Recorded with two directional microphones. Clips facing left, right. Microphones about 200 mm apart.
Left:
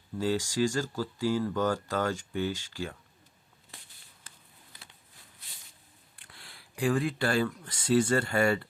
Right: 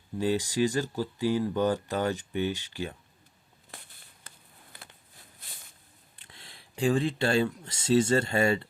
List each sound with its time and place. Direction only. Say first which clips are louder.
0.2 s speech: right 2 dB; 20° right (ahead or behind)
6.1 s speech: right 1 dB; 25° right (ahead or behind)